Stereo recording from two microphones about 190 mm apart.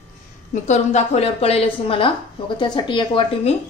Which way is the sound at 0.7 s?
35° left (ahead or behind).